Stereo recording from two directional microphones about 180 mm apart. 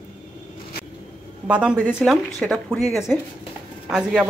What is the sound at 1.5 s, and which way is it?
Speech, 5° right (ahead or behind).